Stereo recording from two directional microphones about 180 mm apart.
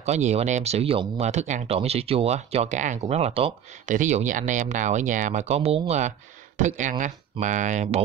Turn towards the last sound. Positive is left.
turn(degrees=-40)  # may be behind; listen again after turning